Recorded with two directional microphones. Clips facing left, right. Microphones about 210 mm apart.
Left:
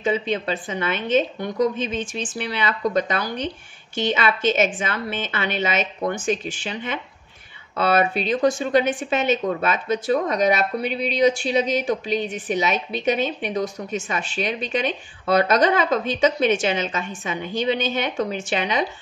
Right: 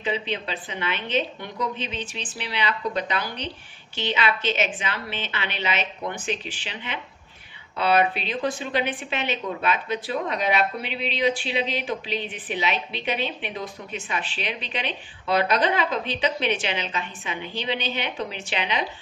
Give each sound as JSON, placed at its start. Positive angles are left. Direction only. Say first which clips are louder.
{"t": 0.0, "sound": "a woman's voice", "louder": "left 5 dB", "side_deg": 45}